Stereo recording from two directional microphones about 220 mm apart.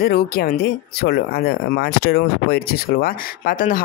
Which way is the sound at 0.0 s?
40° left (ahead or behind).